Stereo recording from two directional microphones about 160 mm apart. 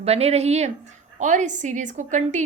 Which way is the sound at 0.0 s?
40° right (ahead or behind).